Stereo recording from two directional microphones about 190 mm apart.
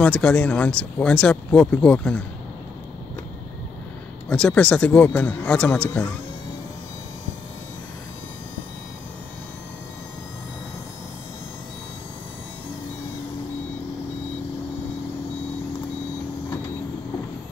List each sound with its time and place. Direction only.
0.0 s speech: 5° left (ahead or behind)
4.3 s speech: 5° left (ahead or behind)